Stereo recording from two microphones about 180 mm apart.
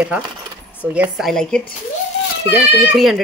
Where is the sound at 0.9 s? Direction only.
5° right (ahead or behind).